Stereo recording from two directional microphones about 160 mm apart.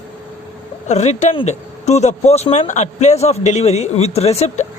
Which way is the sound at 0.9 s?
45° left (ahead or behind).